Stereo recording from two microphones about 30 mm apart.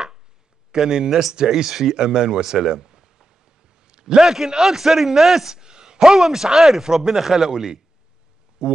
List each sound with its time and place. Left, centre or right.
0.8 s speech: right
1.5 s a man's voice: centre
5.6 s speech: right